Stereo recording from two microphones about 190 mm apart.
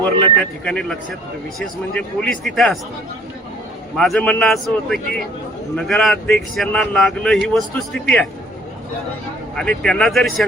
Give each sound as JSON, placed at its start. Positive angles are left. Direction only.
{"t": 0.0, "sound": "speech", "side_deg": 5}
{"t": 3.9, "sound": "speech", "side_deg": 5}
{"t": 9.6, "sound": "speech", "side_deg": 5}